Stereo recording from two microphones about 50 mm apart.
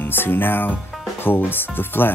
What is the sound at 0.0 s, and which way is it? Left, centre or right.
Speech, left.